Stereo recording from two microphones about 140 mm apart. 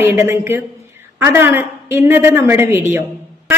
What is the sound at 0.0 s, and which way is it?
A woman's voice, 15° right (ahead or behind).